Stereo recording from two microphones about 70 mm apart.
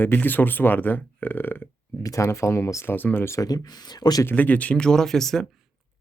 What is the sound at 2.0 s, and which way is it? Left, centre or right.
Speech, left.